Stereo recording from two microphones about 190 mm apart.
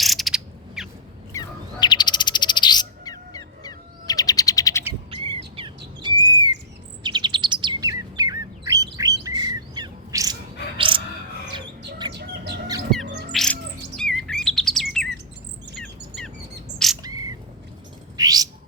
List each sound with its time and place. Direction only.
0.0 s a sound: centre (ahead or behind)
1.3 s bird: 20° left (ahead or behind)
5.1 s bird: 25° right (ahead or behind)
6.0 s squawk: 20° right (ahead or behind)
7.0 s chirp: 25° right (ahead or behind)
9.2 s squawk: 20° right (ahead or behind)
10.8 s bird: 25° right (ahead or behind)
12.1 s bird: 60° right (ahead or behind)
13.3 s chirp: 5° left (ahead or behind)
16.7 s bird: centre (ahead or behind)
17.0 s bird: 20° right (ahead or behind)